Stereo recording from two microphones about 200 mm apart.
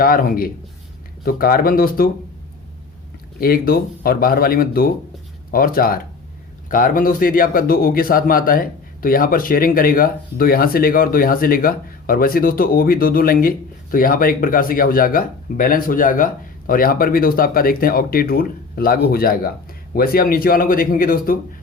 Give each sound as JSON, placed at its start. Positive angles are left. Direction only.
{"t": 0.0, "sound": "speech", "side_deg": 45}
{"t": 3.4, "sound": "speech", "side_deg": 50}